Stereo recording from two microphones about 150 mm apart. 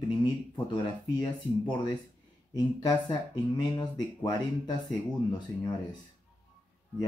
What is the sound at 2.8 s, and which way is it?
Speech, 25° left (ahead or behind).